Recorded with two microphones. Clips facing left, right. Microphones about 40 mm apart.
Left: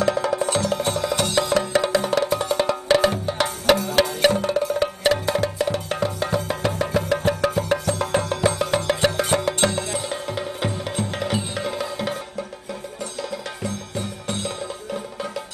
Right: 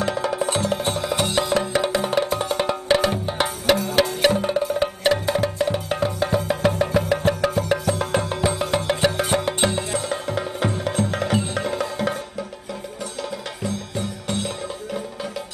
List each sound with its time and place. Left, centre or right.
0.0 s music: right
1.0 s music: centre
3.4 s music: centre
4.4 s music: centre
8.2 s music: centre
9.4 s music: right
10.2 s music: centre
11.3 s music: centre